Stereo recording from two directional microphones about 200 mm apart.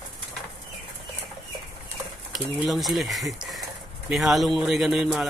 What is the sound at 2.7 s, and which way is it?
Speech, centre (ahead or behind).